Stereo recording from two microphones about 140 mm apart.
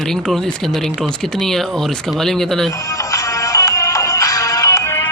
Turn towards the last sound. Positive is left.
turn(degrees=20)  # may be behind; listen again after turning